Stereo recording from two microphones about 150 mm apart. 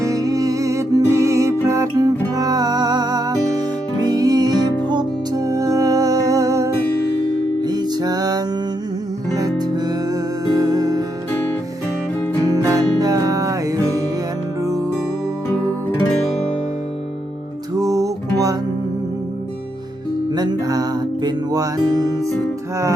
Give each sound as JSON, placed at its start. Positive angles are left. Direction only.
{"t": 0.0, "sound": "music", "side_deg": -25}
{"t": 12.5, "sound": "music", "side_deg": -25}
{"t": 15.4, "sound": "music", "side_deg": 15}
{"t": 17.7, "sound": "music", "side_deg": -25}
{"t": 20.3, "sound": "music", "side_deg": -30}